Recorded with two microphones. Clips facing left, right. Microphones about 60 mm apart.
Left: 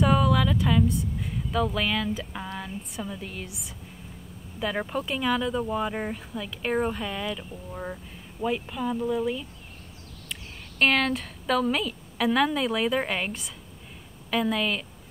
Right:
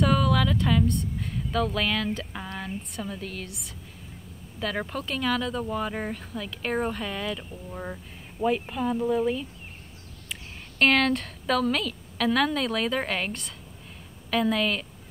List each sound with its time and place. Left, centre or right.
0.0 s a woman's voice: centre
10.8 s a woman's voice: centre